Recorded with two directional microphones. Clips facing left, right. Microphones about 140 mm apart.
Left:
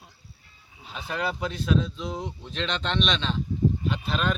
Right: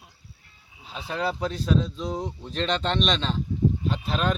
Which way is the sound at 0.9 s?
30° right (ahead or behind).